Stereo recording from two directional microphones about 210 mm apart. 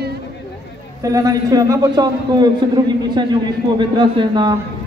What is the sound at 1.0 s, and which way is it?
A man's voice, 15° right (ahead or behind).